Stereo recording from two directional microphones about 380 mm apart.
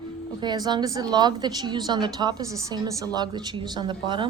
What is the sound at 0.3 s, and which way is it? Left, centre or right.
A woman's voice, centre.